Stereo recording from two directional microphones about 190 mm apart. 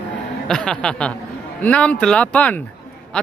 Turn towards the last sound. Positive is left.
turn(degrees=5)  # may be behind; listen again after turning